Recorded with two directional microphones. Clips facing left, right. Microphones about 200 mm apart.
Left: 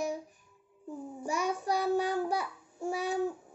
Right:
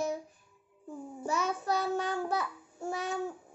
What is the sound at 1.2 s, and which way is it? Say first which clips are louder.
Child singing: even; 15° left (ahead or behind).